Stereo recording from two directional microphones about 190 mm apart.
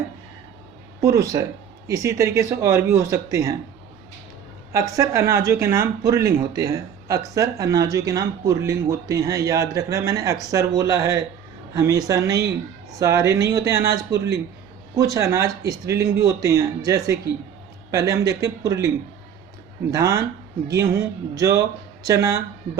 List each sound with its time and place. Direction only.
1.0 s a man's voice: 15° right (ahead or behind)
4.9 s a man's voice: 15° right (ahead or behind)
14.1 s a man's voice: 65° right (ahead or behind)
14.9 s a man's voice: 15° right (ahead or behind)
19.9 s a man's voice: 15° right (ahead or behind)